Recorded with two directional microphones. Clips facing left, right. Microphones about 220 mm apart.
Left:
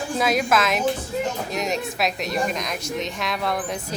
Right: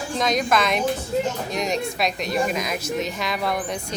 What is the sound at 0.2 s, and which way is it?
A woman's voice, 5° left (ahead or behind).